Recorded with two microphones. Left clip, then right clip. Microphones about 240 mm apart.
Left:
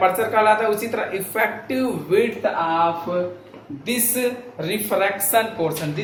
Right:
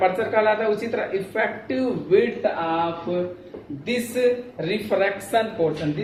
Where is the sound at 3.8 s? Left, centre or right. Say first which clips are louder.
Right 2 dB; centre.